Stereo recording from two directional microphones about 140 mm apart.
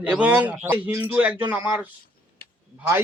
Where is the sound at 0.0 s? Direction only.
10° right (ahead or behind).